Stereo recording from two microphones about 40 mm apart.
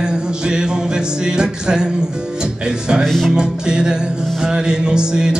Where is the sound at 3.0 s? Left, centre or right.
Centre.